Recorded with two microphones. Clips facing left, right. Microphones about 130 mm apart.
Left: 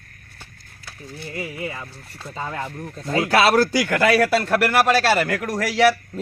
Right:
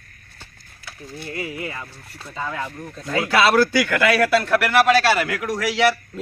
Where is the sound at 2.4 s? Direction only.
35° left (ahead or behind).